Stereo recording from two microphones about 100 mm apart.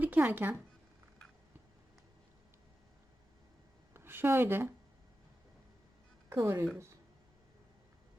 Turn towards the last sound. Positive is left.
turn(degrees=-25)  # may be behind; listen again after turning